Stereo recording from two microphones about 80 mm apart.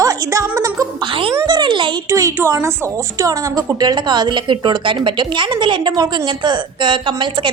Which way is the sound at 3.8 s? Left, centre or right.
Right.